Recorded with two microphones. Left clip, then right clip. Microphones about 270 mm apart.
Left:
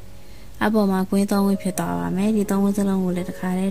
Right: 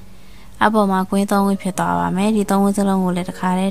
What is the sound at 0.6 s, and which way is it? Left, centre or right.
Speech, centre.